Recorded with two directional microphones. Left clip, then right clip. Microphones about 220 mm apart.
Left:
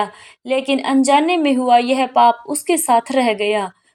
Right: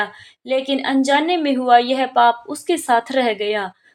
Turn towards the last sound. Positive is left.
turn(degrees=25)  # may be behind; listen again after turning